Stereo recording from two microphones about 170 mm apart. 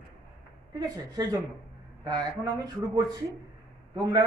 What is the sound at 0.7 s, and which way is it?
Speech, 20° right (ahead or behind).